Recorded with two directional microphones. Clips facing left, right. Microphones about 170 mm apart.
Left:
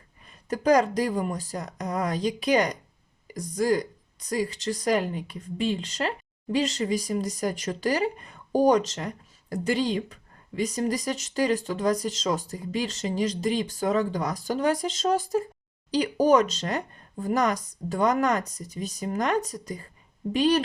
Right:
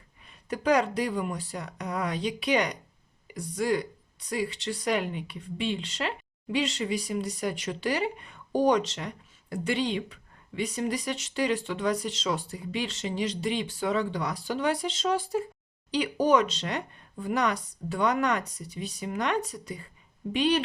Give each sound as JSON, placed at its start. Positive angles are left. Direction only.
{"t": 0.3, "sound": "speech", "side_deg": 40}